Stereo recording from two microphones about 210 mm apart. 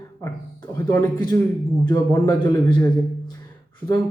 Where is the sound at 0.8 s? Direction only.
15° left (ahead or behind).